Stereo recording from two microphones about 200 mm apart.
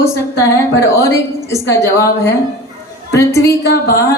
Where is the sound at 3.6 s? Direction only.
50° left (ahead or behind).